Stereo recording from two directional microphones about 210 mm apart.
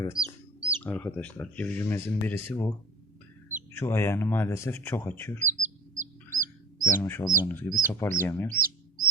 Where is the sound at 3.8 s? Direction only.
10° left (ahead or behind).